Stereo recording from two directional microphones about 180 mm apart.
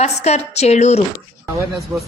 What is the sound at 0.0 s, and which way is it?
A woman's voice, 35° left (ahead or behind).